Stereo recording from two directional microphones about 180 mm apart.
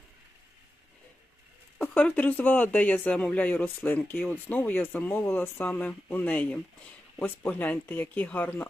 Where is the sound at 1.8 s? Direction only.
5° left (ahead or behind).